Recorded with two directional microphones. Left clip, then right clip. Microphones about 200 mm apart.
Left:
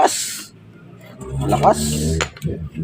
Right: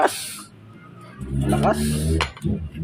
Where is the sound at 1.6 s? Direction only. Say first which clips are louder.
Left 7 dB; 15° left (ahead or behind).